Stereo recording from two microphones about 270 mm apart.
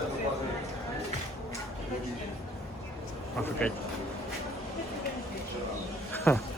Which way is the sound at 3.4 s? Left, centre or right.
Centre.